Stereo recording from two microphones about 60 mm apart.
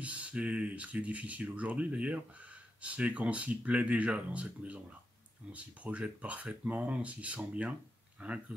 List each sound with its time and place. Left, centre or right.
0.0 s speech: right